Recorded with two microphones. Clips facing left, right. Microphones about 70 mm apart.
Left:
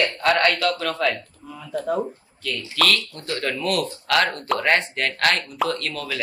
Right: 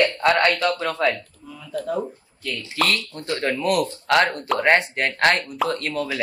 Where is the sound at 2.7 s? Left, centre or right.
Right.